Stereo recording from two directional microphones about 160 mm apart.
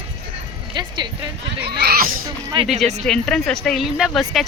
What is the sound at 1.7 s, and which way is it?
Speech, 90° right.